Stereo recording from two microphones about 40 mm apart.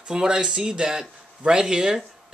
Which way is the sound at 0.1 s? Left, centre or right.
Centre.